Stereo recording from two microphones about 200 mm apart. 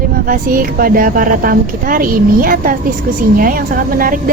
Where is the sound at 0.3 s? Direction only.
45° right (ahead or behind).